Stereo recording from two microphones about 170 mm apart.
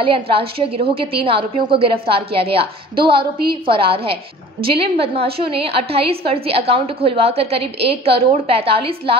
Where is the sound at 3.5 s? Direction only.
30° right (ahead or behind).